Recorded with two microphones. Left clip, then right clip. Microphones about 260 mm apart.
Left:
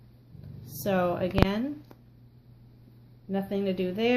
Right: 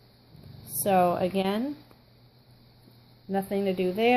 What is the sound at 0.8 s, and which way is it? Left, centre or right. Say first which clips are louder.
Speech: right 4 dB; right.